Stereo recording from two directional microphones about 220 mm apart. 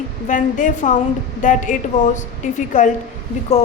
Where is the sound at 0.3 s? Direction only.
35° left (ahead or behind).